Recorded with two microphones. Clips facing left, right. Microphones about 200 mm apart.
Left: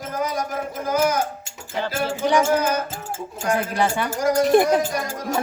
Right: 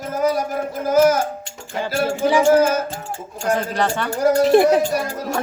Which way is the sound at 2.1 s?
5° right (ahead or behind).